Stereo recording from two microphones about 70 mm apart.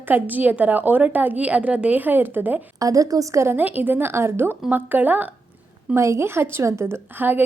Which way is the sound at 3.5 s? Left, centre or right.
Right.